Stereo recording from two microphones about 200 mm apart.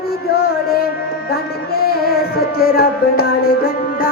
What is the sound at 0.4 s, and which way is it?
Music, 50° left (ahead or behind).